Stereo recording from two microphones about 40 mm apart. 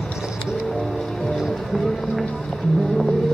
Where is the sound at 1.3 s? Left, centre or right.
Centre.